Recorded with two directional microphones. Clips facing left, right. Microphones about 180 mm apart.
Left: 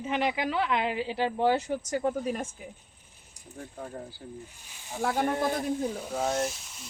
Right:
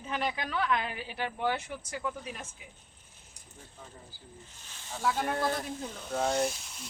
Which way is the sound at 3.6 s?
60° left (ahead or behind).